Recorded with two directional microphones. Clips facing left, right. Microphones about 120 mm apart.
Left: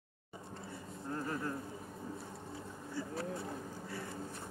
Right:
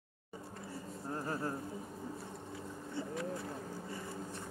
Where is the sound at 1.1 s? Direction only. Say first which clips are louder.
Even; 30° right (ahead or behind).